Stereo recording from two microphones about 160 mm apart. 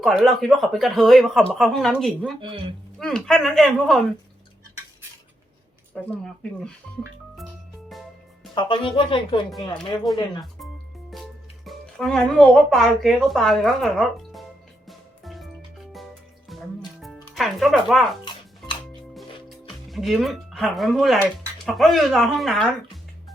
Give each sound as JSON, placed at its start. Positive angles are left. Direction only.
{"t": 0.0, "sound": "speech", "side_deg": 0}
{"t": 2.4, "sound": "speech", "side_deg": -30}
{"t": 3.0, "sound": "speech", "side_deg": 5}
{"t": 5.9, "sound": "speech", "side_deg": 5}
{"t": 8.5, "sound": "speech", "side_deg": 30}
{"t": 10.1, "sound": "speech", "side_deg": 0}
{"t": 14.8, "sound": "music", "side_deg": 0}
{"t": 16.5, "sound": "music", "side_deg": 0}
{"t": 21.7, "sound": "speech", "side_deg": 0}